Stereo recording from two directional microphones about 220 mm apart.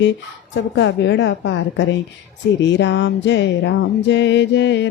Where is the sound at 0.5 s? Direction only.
55° left (ahead or behind).